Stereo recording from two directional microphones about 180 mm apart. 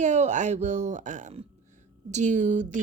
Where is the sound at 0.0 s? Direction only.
40° right (ahead or behind).